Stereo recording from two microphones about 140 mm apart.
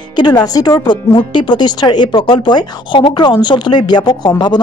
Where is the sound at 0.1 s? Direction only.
30° left (ahead or behind).